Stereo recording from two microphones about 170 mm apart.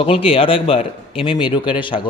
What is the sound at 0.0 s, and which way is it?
A man's voice, 35° left (ahead or behind).